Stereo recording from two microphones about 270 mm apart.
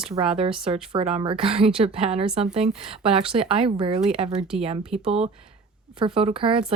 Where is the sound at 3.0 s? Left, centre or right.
Right.